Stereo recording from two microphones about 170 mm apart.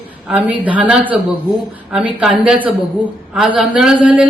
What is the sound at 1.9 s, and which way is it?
Speech, 5° right (ahead or behind).